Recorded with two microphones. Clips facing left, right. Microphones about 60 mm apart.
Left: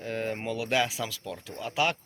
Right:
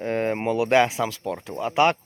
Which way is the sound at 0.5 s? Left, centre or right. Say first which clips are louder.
Right 10 dB; right.